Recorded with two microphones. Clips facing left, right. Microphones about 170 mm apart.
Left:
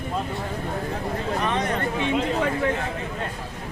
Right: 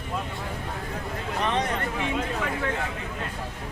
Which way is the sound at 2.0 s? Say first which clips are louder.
Left 5 dB; 25° left (ahead or behind).